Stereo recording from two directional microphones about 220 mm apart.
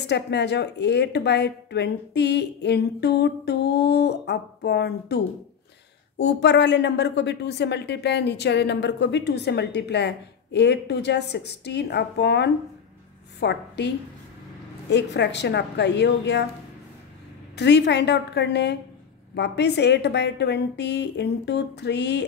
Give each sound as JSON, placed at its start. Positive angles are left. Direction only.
{"t": 0.0, "sound": "speech", "side_deg": 50}
{"t": 6.2, "sound": "speech", "side_deg": 50}
{"t": 17.6, "sound": "speech", "side_deg": 50}